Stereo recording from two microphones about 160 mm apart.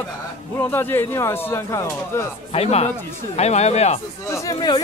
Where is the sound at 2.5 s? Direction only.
40° left (ahead or behind).